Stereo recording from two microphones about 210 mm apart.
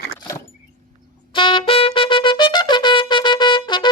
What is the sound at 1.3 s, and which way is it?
Trumpet, 25° left (ahead or behind).